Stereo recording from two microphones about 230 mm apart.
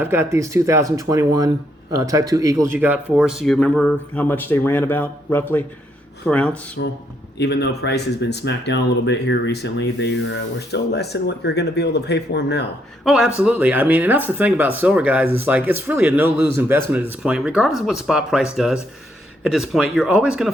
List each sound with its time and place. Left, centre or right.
0.0 s speech: centre
6.8 s speech: left
13.1 s speech: centre